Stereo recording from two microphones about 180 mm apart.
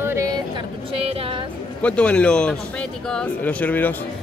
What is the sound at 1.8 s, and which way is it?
A woman's voice, 5° left (ahead or behind).